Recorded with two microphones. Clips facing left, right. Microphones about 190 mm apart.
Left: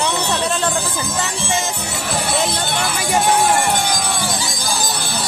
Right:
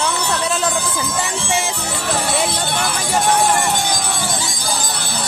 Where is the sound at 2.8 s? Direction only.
5° left (ahead or behind).